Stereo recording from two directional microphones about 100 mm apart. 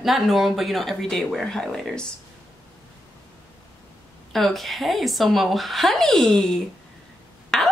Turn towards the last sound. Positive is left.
turn(degrees=5)  # may be behind; listen again after turning